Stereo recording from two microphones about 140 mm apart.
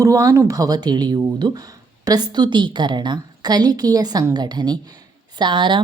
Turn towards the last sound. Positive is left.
turn(degrees=-35)  # may be behind; listen again after turning